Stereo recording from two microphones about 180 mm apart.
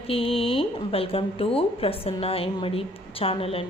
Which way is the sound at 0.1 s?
30° left (ahead or behind).